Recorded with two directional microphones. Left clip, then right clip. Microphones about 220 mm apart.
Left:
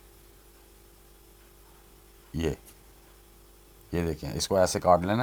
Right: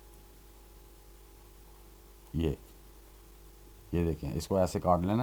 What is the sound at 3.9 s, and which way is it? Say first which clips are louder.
Speech: left 2 dB; 15° left (ahead or behind).